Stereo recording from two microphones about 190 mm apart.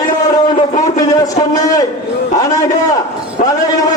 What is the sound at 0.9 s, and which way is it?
Speech, 20° left (ahead or behind).